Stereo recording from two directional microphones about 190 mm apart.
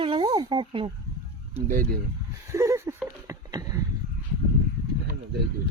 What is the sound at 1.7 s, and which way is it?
Speech, 45° right (ahead or behind).